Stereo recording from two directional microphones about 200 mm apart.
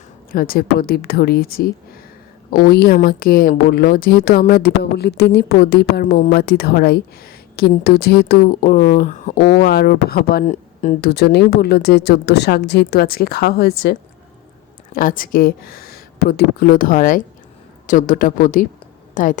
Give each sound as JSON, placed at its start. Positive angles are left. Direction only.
{"t": 0.3, "sound": "speech", "side_deg": 45}
{"t": 9.4, "sound": "speech", "side_deg": 50}
{"t": 10.4, "sound": "a sound", "side_deg": 35}
{"t": 11.0, "sound": "speech", "side_deg": 55}
{"t": 14.9, "sound": "a woman's voice", "side_deg": 45}